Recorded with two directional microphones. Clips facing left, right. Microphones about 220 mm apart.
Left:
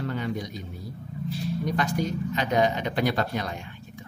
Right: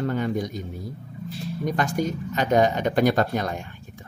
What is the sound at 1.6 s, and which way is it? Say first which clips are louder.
Speech: right 4 dB; 50° right (ahead or behind).